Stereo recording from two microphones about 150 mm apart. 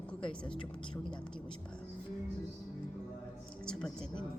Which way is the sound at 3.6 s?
5° left (ahead or behind).